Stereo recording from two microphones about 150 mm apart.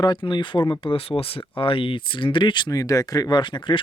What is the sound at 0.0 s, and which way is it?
Speech, 30° left (ahead or behind).